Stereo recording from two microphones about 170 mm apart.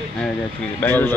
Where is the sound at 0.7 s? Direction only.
10° left (ahead or behind).